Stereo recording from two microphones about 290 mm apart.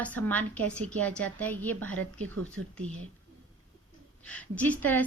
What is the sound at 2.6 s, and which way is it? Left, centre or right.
Speech, right.